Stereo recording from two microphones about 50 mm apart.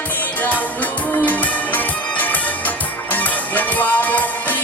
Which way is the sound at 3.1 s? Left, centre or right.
Left.